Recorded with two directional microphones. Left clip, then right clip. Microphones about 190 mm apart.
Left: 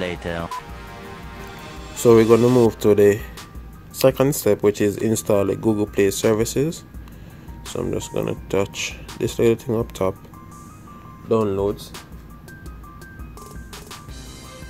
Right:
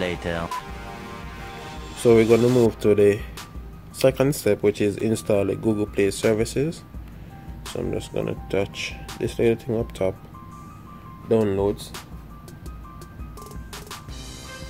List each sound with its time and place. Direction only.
0.0 s speech: centre (ahead or behind)
2.0 s speech: 20° left (ahead or behind)
11.2 s speech: centre (ahead or behind)